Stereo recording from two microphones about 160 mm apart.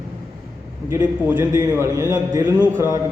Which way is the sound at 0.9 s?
15° right (ahead or behind).